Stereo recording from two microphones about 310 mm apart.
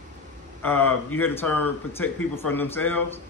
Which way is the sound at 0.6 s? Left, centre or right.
Centre.